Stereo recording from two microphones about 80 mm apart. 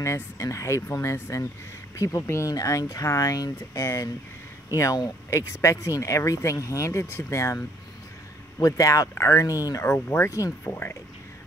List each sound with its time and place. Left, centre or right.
0.0 s speech: left
2.5 s speech: left
8.5 s speech: left
9.1 s speech: left
9.8 s speech: left